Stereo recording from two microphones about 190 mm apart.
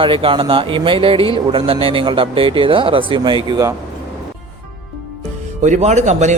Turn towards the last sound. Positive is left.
turn(degrees=-35)  # may be behind; listen again after turning